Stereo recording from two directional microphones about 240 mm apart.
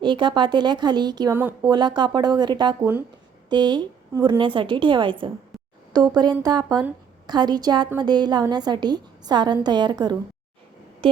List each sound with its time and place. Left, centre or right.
0.0 s a woman's voice: centre
1.8 s a woman's voice: centre
11.0 s a sound: right